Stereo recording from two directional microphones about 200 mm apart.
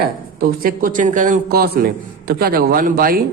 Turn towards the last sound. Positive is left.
turn(degrees=-45)  # may be behind; listen again after turning